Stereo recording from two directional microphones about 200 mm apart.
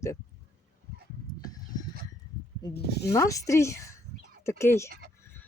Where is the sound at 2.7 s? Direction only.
55° left (ahead or behind).